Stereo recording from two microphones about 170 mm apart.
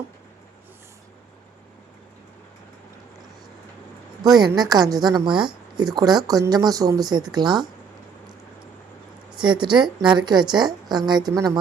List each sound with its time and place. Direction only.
4.2 s a woman's voice: 25° right (ahead or behind)
9.4 s a woman's voice: 25° right (ahead or behind)